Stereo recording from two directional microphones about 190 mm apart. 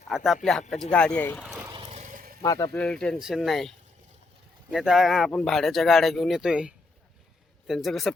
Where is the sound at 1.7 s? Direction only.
25° right (ahead or behind).